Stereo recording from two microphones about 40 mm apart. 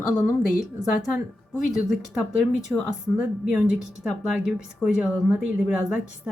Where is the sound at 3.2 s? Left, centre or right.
Right.